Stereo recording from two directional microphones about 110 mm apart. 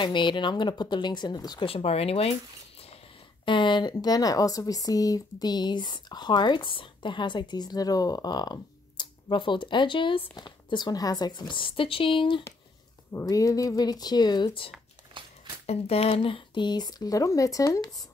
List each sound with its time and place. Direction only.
0.0 s speech: 45° left (ahead or behind)
1.7 s speech: 65° left (ahead or behind)
3.4 s speech: 45° left (ahead or behind)
13.1 s speech: 30° left (ahead or behind); by 14.7 s 45° left (ahead or behind)
15.6 s speech: 70° left (ahead or behind); by 18.0 s 35° left (ahead or behind)